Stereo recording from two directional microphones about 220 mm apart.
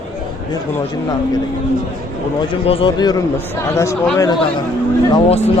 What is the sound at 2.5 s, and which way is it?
Speech, 25° left (ahead or behind).